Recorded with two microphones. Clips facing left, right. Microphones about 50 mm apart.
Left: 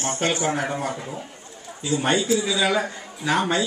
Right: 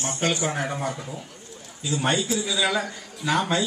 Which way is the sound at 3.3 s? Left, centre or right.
Left.